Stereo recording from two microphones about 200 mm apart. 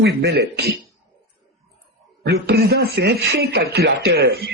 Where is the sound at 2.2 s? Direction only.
55° right (ahead or behind).